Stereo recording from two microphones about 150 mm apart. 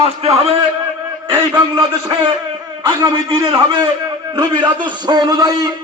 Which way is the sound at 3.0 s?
35° right (ahead or behind).